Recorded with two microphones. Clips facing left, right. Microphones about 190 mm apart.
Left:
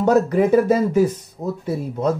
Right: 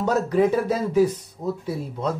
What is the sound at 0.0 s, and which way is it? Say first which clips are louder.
Speech: left 4 dB; 50° left (ahead or behind).